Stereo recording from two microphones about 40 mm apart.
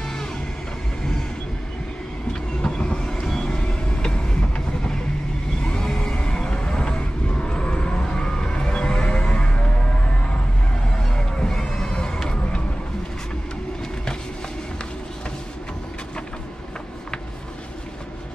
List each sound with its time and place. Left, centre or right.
2.6 s vehicle: centre
3.5 s vehicle: left
11.0 s a sound: centre